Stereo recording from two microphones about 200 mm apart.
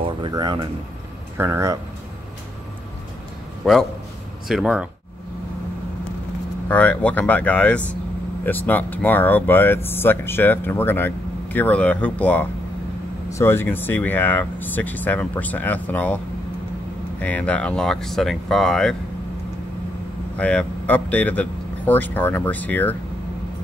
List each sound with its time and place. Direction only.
0.2 s speech: 20° right (ahead or behind)
3.6 s speech: centre (ahead or behind)
6.7 s speech: 5° left (ahead or behind)
17.2 s speech: 5° left (ahead or behind)
20.3 s speech: 5° left (ahead or behind)